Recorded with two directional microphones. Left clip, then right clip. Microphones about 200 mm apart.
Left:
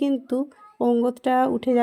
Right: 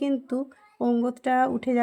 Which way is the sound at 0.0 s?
20° left (ahead or behind).